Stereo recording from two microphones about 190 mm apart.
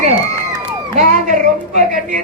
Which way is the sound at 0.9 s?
40° right (ahead or behind).